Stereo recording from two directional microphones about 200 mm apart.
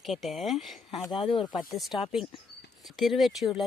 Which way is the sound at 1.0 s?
25° left (ahead or behind).